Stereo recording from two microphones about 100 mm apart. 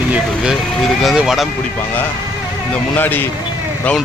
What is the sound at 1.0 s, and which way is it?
Speech, centre (ahead or behind).